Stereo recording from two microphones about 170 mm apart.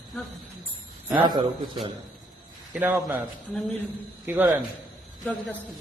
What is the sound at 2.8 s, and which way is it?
Speech, 10° right (ahead or behind).